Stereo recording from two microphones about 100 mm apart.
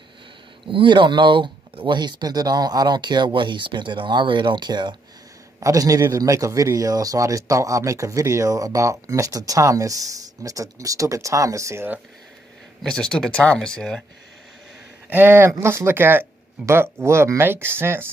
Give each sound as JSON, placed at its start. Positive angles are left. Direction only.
{"t": 0.7, "sound": "speech", "side_deg": -55}
{"t": 5.6, "sound": "a man's voice", "side_deg": -35}
{"t": 12.8, "sound": "speech", "side_deg": 5}
{"t": 15.0, "sound": "speech", "side_deg": -20}